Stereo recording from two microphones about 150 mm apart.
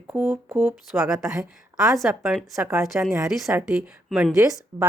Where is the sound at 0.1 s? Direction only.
10° right (ahead or behind).